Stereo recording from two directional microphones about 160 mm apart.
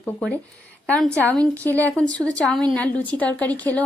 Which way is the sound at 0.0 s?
5° left (ahead or behind).